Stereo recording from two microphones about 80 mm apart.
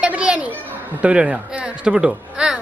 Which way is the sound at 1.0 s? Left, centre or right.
Centre.